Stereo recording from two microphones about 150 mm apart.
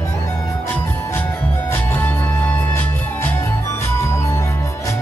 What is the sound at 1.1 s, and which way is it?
Music, 15° left (ahead or behind).